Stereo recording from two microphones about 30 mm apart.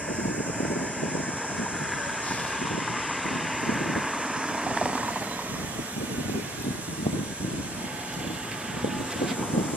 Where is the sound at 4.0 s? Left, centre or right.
Right.